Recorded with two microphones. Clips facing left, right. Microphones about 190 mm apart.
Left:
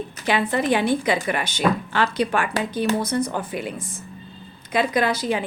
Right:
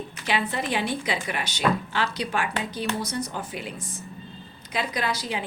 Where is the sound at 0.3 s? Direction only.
50° left (ahead or behind).